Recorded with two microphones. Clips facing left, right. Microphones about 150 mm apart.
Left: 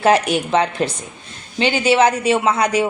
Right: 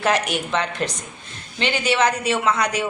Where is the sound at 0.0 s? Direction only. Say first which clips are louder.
Left 6 dB; 35° left (ahead or behind).